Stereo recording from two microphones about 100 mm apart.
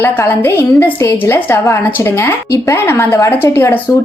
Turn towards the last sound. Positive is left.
turn(degrees=25)  # may be behind; listen again after turning